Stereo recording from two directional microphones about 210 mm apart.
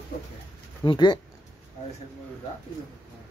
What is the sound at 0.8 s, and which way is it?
Speech, 20° left (ahead or behind).